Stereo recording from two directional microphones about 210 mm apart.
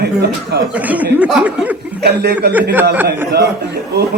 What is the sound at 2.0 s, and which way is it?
Speech, 55° right (ahead or behind).